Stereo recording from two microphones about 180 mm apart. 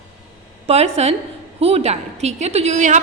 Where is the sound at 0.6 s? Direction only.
35° right (ahead or behind).